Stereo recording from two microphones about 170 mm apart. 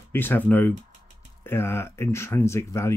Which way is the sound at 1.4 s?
15° left (ahead or behind).